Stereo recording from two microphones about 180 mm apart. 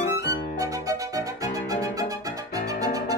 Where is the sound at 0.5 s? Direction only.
20° right (ahead or behind).